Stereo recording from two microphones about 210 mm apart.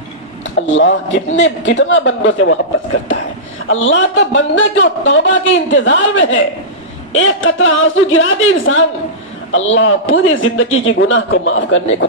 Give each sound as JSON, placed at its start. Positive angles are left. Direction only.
{"t": 0.6, "sound": "a man's voice", "side_deg": 65}
{"t": 3.6, "sound": "a man's voice", "side_deg": 65}